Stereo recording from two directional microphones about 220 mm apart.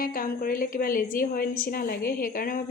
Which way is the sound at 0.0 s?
40° left (ahead or behind).